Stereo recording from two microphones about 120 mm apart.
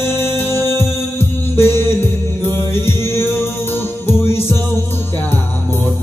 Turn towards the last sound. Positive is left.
turn(degrees=20)  # may be behind; listen again after turning